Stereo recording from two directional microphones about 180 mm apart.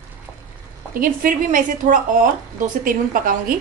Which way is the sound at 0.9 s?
50° right (ahead or behind).